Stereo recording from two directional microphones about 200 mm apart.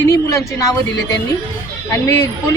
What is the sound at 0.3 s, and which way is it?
Speech, 15° left (ahead or behind).